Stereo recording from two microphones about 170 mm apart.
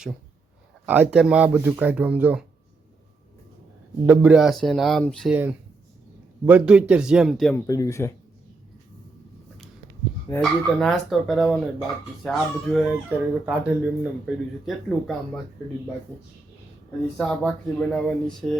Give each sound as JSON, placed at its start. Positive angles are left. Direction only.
{"t": 0.9, "sound": "speech", "side_deg": -5}
{"t": 4.0, "sound": "speech", "side_deg": -10}
{"t": 7.5, "sound": "speech", "side_deg": 20}
{"t": 10.4, "sound": "speech", "side_deg": 0}
{"t": 17.2, "sound": "speech", "side_deg": 5}